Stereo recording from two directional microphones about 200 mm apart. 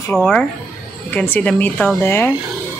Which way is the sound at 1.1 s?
10° left (ahead or behind).